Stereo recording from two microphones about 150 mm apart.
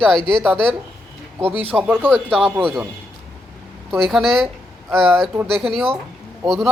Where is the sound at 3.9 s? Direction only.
Centre (ahead or behind).